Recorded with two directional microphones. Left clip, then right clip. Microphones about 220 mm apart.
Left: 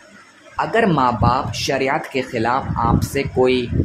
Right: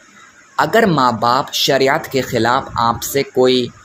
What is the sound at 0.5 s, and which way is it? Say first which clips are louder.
Speech: right 4 dB; 20° right (ahead or behind).